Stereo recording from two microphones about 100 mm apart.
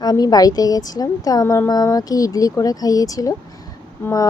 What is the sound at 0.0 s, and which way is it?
A woman's voice, 40° left (ahead or behind).